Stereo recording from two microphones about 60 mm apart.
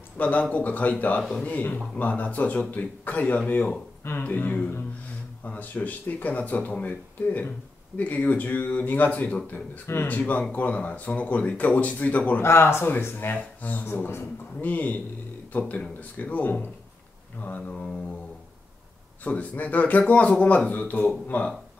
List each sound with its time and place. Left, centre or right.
0.2 s speech: left
12.4 s speech: left
13.8 s speech: left
14.6 s speech: left
19.2 s speech: left